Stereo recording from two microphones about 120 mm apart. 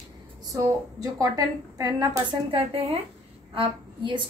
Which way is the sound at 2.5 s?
60° right (ahead or behind).